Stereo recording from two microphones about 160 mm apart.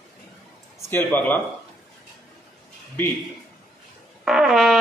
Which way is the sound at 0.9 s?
10° left (ahead or behind).